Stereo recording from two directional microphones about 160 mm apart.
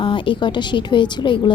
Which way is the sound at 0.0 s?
30° left (ahead or behind).